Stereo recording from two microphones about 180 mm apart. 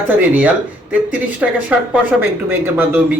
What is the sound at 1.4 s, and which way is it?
Speech, 5° right (ahead or behind).